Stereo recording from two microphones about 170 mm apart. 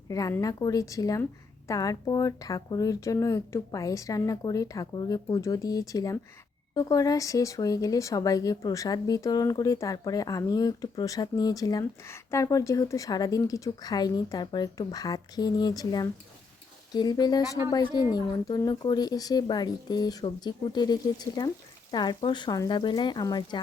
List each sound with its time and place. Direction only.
0.1 s speech: 20° left (ahead or behind)